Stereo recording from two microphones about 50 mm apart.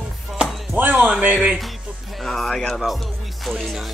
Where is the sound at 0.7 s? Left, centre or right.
Right.